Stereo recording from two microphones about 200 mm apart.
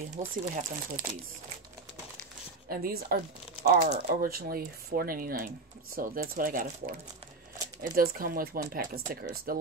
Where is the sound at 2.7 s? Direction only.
50° right (ahead or behind).